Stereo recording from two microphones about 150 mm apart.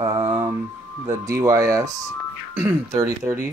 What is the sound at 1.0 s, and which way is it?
Speech, 20° right (ahead or behind).